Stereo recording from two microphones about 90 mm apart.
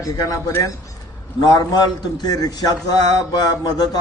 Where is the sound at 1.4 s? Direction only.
50° left (ahead or behind).